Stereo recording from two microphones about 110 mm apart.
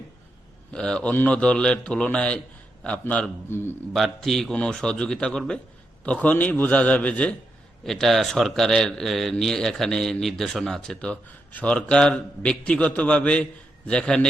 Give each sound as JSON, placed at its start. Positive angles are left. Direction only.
{"t": 0.7, "sound": "a man's voice", "side_deg": 10}
{"t": 3.9, "sound": "a man's voice", "side_deg": 0}